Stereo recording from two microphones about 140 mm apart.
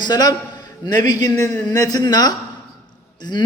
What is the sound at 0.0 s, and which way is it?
A man's voice, 30° left (ahead or behind).